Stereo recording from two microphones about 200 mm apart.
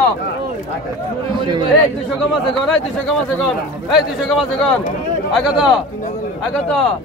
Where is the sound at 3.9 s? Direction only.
Centre (ahead or behind).